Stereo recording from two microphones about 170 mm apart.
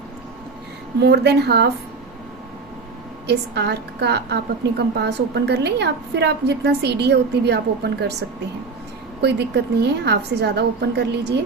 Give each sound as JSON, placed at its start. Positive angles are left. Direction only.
{"t": 0.9, "sound": "speech", "side_deg": -80}
{"t": 3.2, "sound": "a woman's voice", "side_deg": -80}
{"t": 9.2, "sound": "a woman's voice", "side_deg": -80}